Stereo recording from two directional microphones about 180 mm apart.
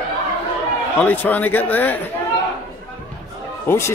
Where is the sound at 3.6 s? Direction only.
15° left (ahead or behind).